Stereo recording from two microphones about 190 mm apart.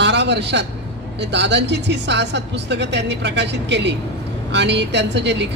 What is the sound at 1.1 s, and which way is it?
A man's voice, 65° right (ahead or behind).